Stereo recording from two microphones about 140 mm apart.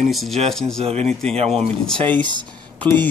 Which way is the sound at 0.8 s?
50° right (ahead or behind).